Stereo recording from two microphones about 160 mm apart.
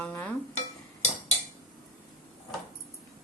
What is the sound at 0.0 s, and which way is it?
Stir, 10° left (ahead or behind).